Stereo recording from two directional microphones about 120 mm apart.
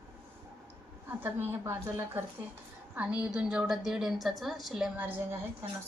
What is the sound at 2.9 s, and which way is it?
A woman's voice, 10° right (ahead or behind).